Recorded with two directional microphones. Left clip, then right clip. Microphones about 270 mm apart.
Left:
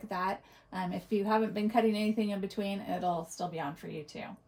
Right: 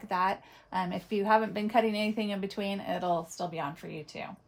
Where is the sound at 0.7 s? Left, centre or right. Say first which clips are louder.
Right 3 dB; centre.